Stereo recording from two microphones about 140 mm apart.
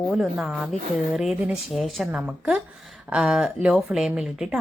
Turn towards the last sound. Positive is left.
turn(degrees=-5)  # may be behind; listen again after turning